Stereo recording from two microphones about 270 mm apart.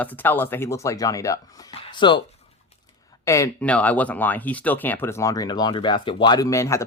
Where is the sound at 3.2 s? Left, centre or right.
Centre.